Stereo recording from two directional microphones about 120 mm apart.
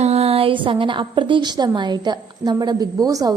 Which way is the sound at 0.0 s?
60° right (ahead or behind).